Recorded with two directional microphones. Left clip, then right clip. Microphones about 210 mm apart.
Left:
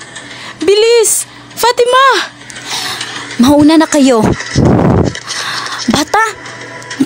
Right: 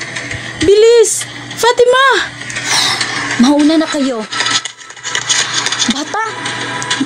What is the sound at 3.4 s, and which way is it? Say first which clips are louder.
Speech: left 4 dB; 50° left (ahead or behind).